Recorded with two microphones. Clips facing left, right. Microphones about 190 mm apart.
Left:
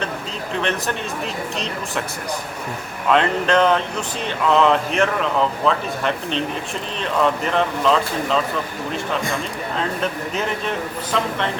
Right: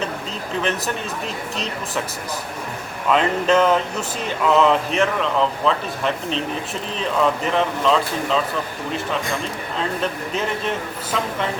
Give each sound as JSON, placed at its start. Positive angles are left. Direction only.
{"t": 3.1, "sound": "speech", "side_deg": -5}
{"t": 7.5, "sound": "speech", "side_deg": 0}
{"t": 9.7, "sound": "speech", "side_deg": 0}